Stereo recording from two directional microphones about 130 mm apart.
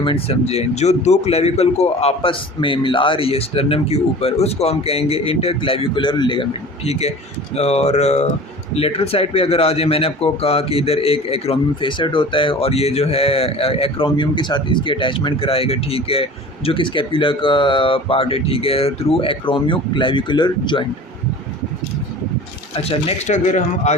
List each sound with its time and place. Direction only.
0.0 s speech: 45° left (ahead or behind)
7.5 s speech: 55° left (ahead or behind); by 20.8 s 35° left (ahead or behind)
22.7 s speech: 50° left (ahead or behind); by 23.9 s 65° left (ahead or behind)